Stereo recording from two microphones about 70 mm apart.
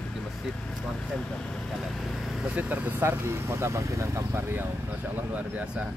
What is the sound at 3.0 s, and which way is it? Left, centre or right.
Speech, right.